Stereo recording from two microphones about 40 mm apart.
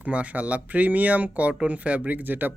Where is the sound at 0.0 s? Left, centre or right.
Right.